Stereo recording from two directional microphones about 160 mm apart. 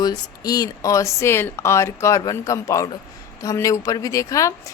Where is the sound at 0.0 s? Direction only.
25° left (ahead or behind).